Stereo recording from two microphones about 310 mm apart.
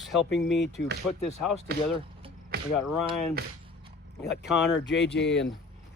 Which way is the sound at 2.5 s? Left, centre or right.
Right.